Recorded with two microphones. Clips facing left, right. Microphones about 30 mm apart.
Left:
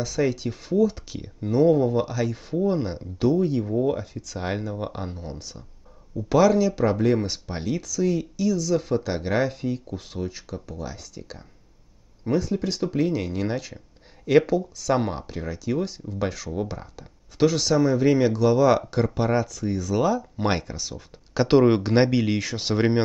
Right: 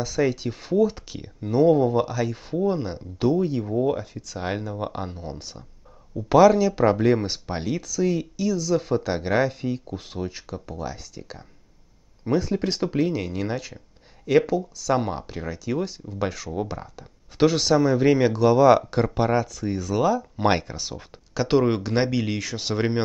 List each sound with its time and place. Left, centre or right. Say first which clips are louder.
0.0 s speech: right 1 dB; centre
0.6 s speech: right 1 dB; centre
7.7 s speech: even; centre
12.4 s speech: right 1 dB; right
12.9 s speech: even; centre
17.4 s speech: right 1 dB; centre
21.3 s speech: left 3 dB; centre